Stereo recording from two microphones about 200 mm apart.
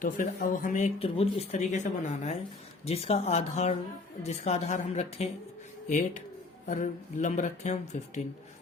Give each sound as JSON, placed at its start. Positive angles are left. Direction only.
{"t": 0.0, "sound": "speech", "side_deg": 45}
{"t": 0.9, "sound": "speech", "side_deg": 30}